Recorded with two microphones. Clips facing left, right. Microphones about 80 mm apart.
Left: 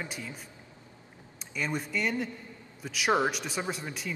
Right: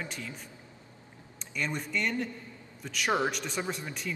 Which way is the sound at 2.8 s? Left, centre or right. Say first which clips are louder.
Even; centre.